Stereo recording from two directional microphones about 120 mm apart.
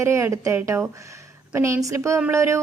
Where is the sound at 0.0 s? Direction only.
25° right (ahead or behind).